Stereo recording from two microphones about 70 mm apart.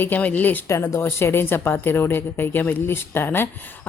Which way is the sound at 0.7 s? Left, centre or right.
Left.